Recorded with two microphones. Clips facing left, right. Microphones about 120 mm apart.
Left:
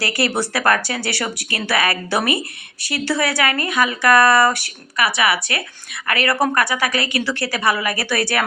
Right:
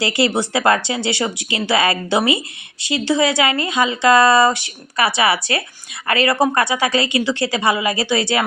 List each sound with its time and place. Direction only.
0.0 s a woman's voice: 20° right (ahead or behind)